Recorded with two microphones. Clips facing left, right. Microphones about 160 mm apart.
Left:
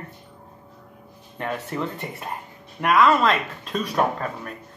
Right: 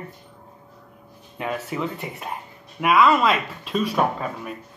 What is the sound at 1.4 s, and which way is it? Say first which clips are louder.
Speech: right 1 dB; centre (ahead or behind).